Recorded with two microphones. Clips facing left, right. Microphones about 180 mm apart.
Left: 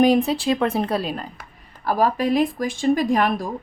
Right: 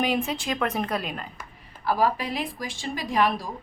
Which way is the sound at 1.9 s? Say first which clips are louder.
Left 5 dB; 45° left (ahead or behind).